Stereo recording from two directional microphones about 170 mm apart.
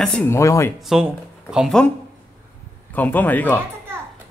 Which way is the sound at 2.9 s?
10° left (ahead or behind).